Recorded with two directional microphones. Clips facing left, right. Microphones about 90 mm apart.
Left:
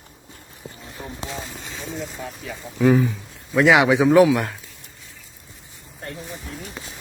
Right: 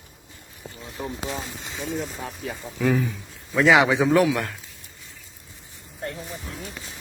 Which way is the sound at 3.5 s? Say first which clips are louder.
Left 2 dB; 5° left (ahead or behind).